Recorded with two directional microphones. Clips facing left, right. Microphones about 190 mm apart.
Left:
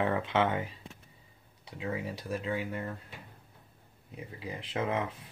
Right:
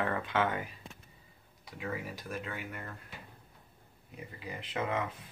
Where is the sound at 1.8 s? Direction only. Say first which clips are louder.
Left 3 dB; 30° left (ahead or behind).